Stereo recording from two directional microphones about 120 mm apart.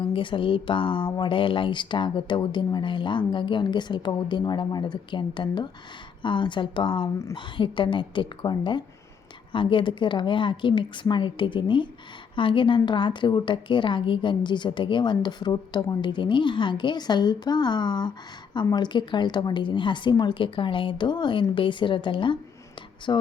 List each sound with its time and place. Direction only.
0.0 s a woman's voice: 45° left (ahead or behind)